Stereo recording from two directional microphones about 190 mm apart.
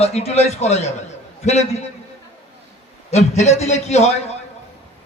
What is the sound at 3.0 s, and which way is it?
A man's voice, 35° left (ahead or behind).